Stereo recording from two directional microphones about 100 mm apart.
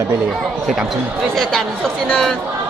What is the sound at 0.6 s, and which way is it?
Speech, centre (ahead or behind).